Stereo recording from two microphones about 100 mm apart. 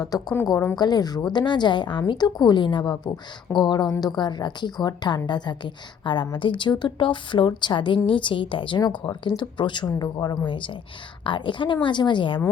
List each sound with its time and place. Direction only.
0.0 s a woman's voice: 40° left (ahead or behind)